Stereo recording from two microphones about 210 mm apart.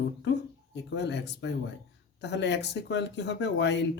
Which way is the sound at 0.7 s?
55° left (ahead or behind).